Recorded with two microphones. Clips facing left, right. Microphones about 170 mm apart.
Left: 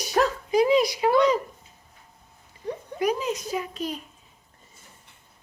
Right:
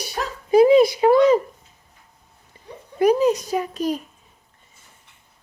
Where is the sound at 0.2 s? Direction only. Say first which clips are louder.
Left 7 dB; 80° left.